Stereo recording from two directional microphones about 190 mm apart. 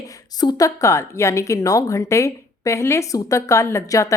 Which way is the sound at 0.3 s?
20° left (ahead or behind).